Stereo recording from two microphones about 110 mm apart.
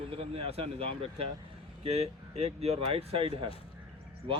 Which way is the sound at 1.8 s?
75° right (ahead or behind).